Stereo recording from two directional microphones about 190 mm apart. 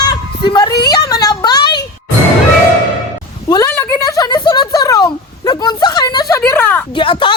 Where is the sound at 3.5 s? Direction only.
20° left (ahead or behind).